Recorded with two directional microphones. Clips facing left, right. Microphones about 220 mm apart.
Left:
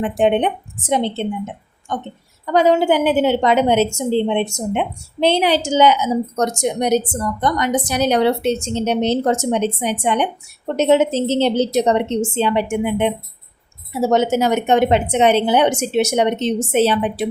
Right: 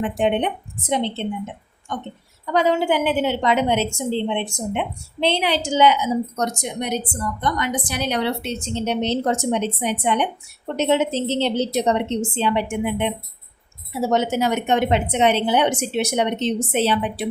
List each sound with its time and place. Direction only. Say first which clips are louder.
0.2 s a woman's voice: left 6 dB; 50° left (ahead or behind)
2.5 s a woman's voice: left 5 dB; 45° left (ahead or behind)